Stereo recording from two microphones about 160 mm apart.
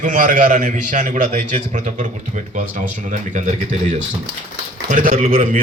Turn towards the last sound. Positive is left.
turn(degrees=-60)  # may be behind; listen again after turning